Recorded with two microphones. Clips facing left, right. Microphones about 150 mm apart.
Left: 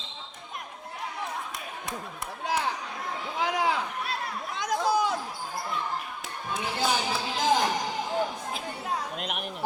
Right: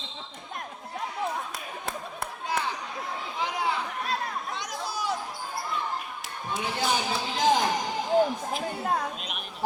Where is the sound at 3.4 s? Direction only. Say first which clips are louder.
Left 3 dB; 90° left.